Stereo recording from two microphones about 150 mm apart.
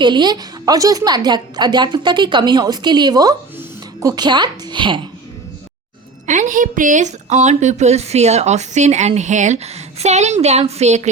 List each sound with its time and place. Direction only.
0.0 s a woman's voice: 30° right (ahead or behind)
6.2 s a woman's voice: 55° right (ahead or behind)